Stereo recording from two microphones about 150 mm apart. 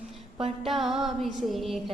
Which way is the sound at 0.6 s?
Centre (ahead or behind).